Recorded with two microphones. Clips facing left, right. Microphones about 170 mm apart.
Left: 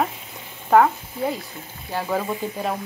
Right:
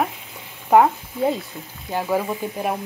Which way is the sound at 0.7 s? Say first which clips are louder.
Right 1 dB; 20° right (ahead or behind).